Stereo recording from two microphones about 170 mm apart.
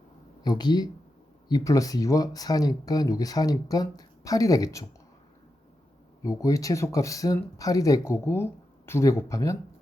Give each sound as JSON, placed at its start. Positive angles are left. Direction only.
{"t": 0.4, "sound": "speech", "side_deg": 25}
{"t": 6.2, "sound": "speech", "side_deg": 20}